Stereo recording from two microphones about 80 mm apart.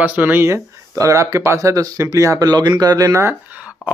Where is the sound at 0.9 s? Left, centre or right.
Right.